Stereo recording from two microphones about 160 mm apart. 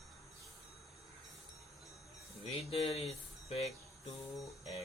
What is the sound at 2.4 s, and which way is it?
Speech, 40° left (ahead or behind).